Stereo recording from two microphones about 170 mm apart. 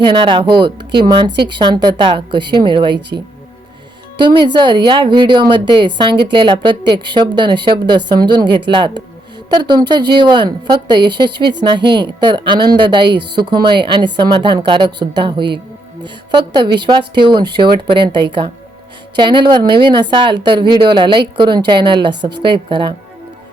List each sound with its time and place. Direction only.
0.0 s speech: 30° right (ahead or behind)
4.2 s speech: 30° right (ahead or behind)